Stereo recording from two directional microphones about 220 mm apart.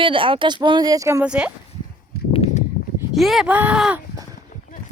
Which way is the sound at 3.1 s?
Centre (ahead or behind).